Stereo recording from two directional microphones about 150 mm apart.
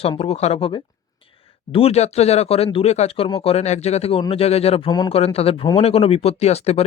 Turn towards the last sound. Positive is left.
turn(degrees=45)  # may be behind; listen again after turning